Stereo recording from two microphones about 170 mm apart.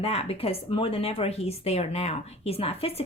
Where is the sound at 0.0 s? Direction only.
35° left (ahead or behind).